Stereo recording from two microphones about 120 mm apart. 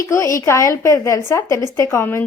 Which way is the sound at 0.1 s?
25° left (ahead or behind).